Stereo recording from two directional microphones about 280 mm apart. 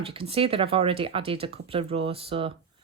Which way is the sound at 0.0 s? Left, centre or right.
Centre.